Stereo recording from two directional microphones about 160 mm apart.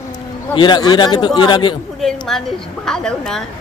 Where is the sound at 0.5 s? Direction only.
30° left (ahead or behind).